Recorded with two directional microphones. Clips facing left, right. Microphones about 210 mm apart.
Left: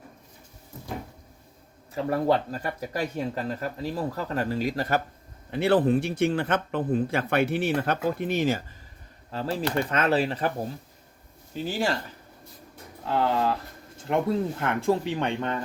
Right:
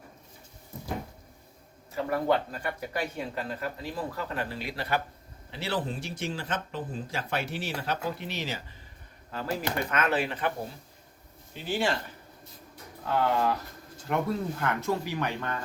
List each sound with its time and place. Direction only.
2.0 s speech: 35° left (ahead or behind)
5.5 s speech: 55° left (ahead or behind)
9.3 s speech: 30° left (ahead or behind)
11.5 s speech: 40° left (ahead or behind)
13.1 s speech: 30° left (ahead or behind)